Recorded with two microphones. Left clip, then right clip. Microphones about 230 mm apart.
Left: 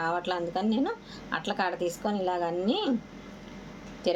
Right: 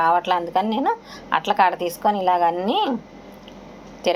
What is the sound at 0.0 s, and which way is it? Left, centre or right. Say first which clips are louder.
A woman's voice: right 11 dB; centre.